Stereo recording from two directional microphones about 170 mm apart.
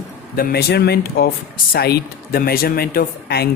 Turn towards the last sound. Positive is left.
turn(degrees=70)  # may be behind; listen again after turning